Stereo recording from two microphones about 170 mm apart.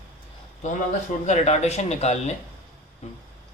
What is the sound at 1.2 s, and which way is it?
Speech, 40° left (ahead or behind).